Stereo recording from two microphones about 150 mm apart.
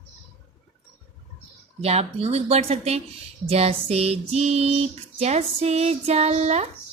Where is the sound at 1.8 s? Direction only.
40° right (ahead or behind).